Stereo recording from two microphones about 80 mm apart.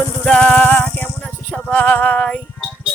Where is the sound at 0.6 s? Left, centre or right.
Left.